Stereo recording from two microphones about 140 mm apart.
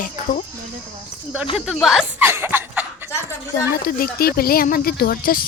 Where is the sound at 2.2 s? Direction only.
15° right (ahead or behind).